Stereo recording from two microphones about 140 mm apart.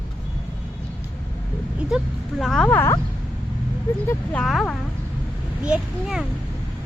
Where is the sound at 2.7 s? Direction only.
15° left (ahead or behind).